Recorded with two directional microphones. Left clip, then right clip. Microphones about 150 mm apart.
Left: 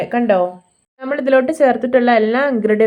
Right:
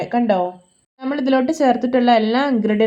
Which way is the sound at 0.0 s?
15° left (ahead or behind).